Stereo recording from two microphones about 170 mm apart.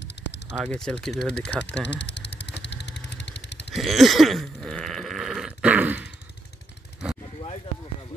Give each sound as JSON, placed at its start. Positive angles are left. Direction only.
{"t": 0.7, "sound": "speech", "side_deg": 5}
{"t": 1.9, "sound": "vehicle", "side_deg": 90}
{"t": 3.7, "sound": "a sound", "side_deg": 0}